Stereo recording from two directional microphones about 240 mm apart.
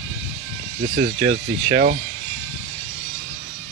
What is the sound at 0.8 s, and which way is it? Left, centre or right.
Speech, right.